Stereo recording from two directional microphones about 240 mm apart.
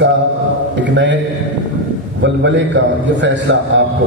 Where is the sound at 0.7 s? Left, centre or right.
Right.